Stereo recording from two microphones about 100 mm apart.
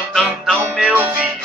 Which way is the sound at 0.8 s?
20° right (ahead or behind).